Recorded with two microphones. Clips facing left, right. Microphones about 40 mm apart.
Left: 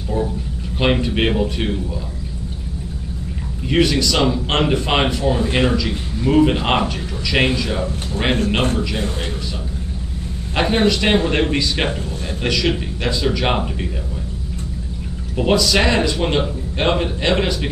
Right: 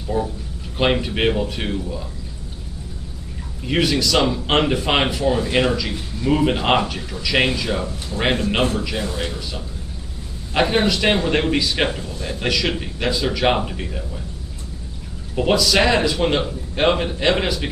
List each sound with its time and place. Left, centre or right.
0.2 s speech: centre
0.7 s a man's voice: centre
3.6 s a man's voice: centre
7.8 s speech: left
10.5 s a man's voice: centre
15.3 s a man's voice: centre